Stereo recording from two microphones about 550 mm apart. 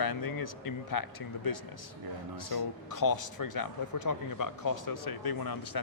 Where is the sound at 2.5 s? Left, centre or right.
Left.